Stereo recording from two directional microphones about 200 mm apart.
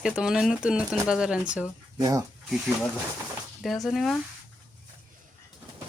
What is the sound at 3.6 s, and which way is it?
Speech, centre (ahead or behind).